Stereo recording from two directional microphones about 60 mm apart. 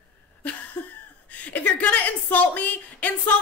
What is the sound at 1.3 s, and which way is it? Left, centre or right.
Speech, left.